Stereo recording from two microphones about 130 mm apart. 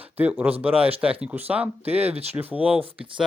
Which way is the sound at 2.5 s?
10° right (ahead or behind).